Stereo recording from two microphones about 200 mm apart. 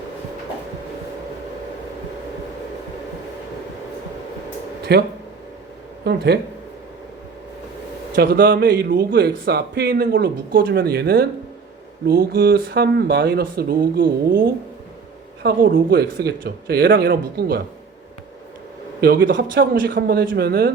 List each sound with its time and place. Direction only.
4.9 s speech: 55° right (ahead or behind)
6.1 s speech: 55° right (ahead or behind)
8.1 s speech: 55° right (ahead or behind)
15.4 s speech: 55° right (ahead or behind)
19.0 s speech: 45° right (ahead or behind)
19.4 s speech: 60° right (ahead or behind)